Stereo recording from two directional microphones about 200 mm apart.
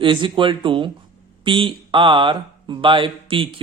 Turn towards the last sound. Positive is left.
turn(degrees=-25)  # may be behind; listen again after turning